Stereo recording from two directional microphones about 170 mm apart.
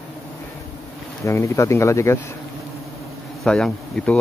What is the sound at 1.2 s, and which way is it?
Speech, 15° left (ahead or behind).